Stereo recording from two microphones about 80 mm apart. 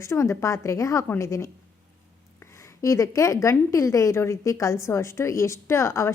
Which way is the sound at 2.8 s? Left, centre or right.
Left.